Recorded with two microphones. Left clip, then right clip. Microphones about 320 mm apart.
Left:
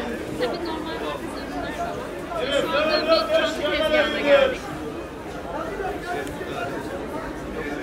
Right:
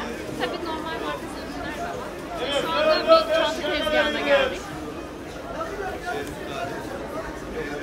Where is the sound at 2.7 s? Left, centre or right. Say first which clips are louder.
Right 4 dB; right.